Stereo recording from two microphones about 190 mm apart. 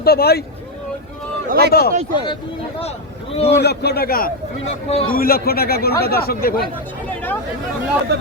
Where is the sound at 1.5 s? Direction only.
55° right (ahead or behind).